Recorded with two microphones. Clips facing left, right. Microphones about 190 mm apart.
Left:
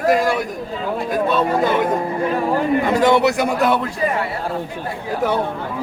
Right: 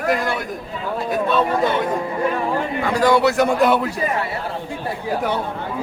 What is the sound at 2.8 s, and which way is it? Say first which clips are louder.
Speech: right 1 dB; 20° left (ahead or behind).